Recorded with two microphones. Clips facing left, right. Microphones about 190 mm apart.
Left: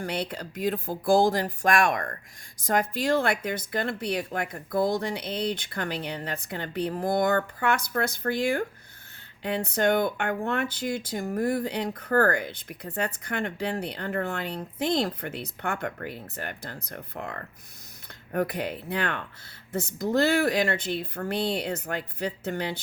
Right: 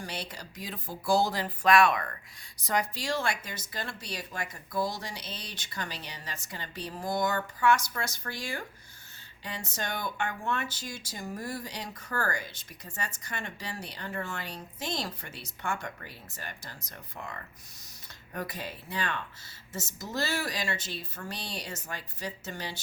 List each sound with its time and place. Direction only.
0.0 s speech: 55° left (ahead or behind)